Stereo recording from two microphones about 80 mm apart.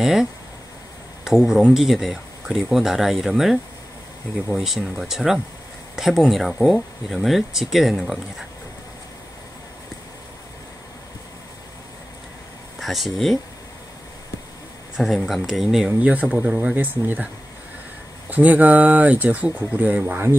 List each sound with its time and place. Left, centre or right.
0.0 s speech: centre
12.7 s speech: centre
15.0 s speech: centre
16.0 s speech: centre
16.7 s speech: right
18.3 s speech: centre